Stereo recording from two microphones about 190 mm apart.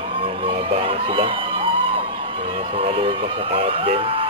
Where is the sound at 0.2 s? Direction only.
30° right (ahead or behind).